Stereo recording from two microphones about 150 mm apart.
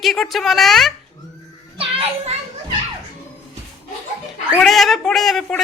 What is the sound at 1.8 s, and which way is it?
Children playing, 40° right (ahead or behind).